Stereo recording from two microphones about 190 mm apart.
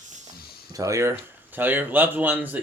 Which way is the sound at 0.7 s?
15° right (ahead or behind).